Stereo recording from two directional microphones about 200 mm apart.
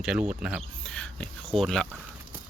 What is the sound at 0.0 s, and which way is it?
Speech, 5° right (ahead or behind).